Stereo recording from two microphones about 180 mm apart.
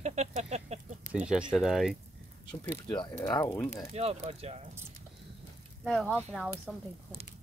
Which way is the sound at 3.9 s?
35° right (ahead or behind).